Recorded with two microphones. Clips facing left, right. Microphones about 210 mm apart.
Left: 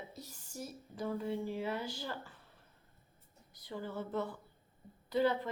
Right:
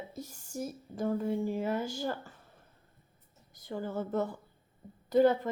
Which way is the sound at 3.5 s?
45° right (ahead or behind).